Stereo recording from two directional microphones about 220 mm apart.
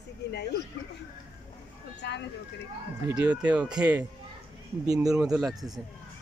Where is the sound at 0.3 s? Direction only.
50° left (ahead or behind).